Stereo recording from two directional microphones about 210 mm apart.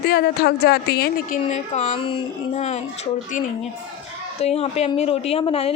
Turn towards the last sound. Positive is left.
turn(degrees=25)  # may be behind; listen again after turning